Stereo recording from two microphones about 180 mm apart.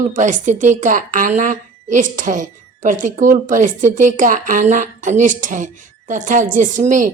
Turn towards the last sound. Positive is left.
turn(degrees=-45)  # may be behind; listen again after turning